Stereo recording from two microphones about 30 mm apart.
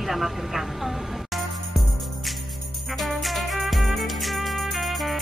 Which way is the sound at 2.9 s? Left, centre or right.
Centre.